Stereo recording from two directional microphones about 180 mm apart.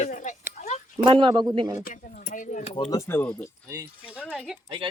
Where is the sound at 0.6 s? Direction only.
40° left (ahead or behind).